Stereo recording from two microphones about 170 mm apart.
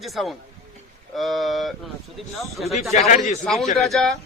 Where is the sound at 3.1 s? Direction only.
45° left (ahead or behind).